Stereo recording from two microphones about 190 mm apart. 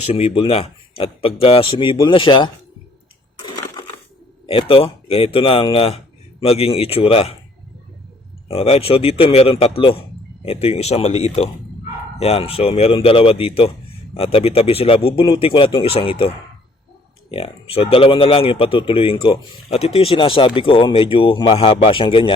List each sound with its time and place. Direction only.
0.0 s speech: 30° left (ahead or behind)
3.4 s crushing: 20° left (ahead or behind)
4.4 s a man's voice: 30° left (ahead or behind)
8.4 s a man's voice: 30° left (ahead or behind)
17.3 s speech: 30° left (ahead or behind)